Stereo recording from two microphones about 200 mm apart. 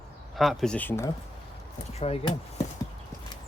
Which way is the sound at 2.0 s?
30° left (ahead or behind).